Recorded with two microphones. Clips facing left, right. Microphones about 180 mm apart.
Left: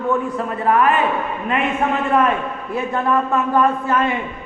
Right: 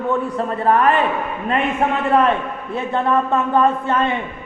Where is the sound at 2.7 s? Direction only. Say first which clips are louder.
Right 1 dB; 30° right (ahead or behind).